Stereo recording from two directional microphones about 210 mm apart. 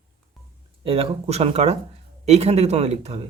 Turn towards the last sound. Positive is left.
turn(degrees=-30)  # may be behind; listen again after turning